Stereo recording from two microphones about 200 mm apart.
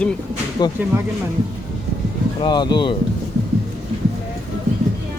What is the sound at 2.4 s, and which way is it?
Speech, 20° left (ahead or behind).